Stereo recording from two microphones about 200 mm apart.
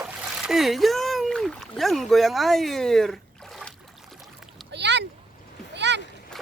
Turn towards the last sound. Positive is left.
turn(degrees=-60)  # may be behind; listen again after turning